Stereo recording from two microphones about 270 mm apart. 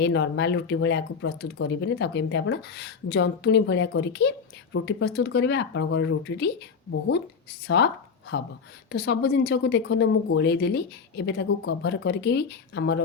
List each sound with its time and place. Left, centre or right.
0.0 s speech: left
7.8 s speech: left